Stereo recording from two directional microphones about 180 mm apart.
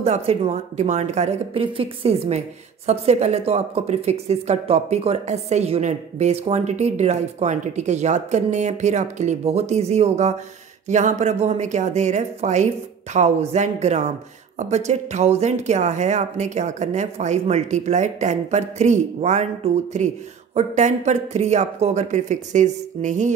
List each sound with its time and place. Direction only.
0.0 s speech: 35° right (ahead or behind)